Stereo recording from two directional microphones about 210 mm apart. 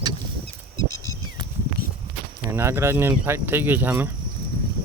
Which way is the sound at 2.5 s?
10° right (ahead or behind).